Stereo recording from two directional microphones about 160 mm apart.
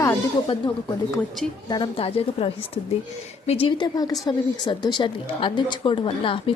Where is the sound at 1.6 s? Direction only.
30° left (ahead or behind).